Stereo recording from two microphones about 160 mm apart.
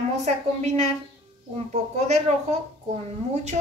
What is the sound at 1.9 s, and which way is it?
Speech, 45° right (ahead or behind).